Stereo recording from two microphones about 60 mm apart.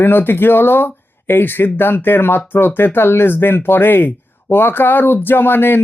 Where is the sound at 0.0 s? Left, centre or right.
Left.